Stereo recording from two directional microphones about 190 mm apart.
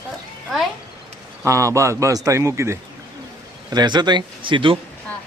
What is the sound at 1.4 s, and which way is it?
Speech, 15° right (ahead or behind).